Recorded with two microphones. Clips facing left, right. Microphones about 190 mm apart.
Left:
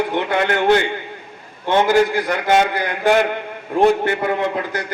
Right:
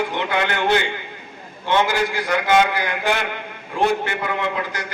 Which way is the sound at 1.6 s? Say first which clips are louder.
Left 5 dB; 50° left (ahead or behind).